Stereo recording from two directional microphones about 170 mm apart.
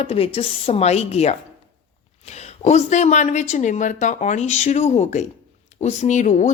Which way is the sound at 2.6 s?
40° left (ahead or behind).